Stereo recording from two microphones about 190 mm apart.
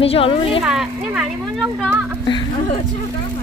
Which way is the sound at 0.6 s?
5° right (ahead or behind).